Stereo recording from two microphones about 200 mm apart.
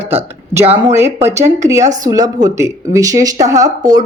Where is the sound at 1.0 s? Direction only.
15° right (ahead or behind).